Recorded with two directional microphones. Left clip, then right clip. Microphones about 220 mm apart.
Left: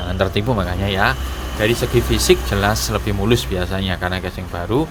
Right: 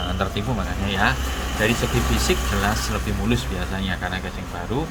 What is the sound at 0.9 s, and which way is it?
Speech, 55° left (ahead or behind).